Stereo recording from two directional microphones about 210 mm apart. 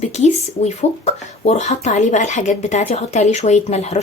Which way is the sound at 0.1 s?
30° left (ahead or behind).